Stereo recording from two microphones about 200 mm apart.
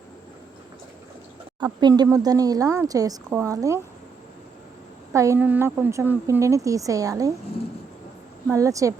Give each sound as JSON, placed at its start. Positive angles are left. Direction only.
{"t": 1.8, "sound": "a woman's voice", "side_deg": -20}
{"t": 5.1, "sound": "a woman's voice", "side_deg": -15}
{"t": 8.4, "sound": "a woman's voice", "side_deg": -15}